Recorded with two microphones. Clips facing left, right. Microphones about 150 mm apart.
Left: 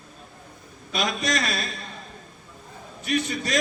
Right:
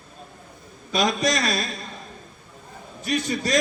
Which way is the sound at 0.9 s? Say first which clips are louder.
Right 4 dB; 35° right (ahead or behind).